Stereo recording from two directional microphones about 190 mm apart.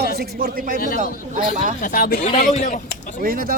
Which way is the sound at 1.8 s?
45° left (ahead or behind).